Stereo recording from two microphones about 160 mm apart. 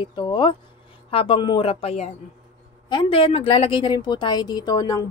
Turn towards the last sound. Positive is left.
turn(degrees=25)  # may be behind; listen again after turning